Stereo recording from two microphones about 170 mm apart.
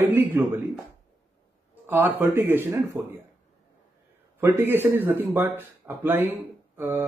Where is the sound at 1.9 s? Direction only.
15° right (ahead or behind).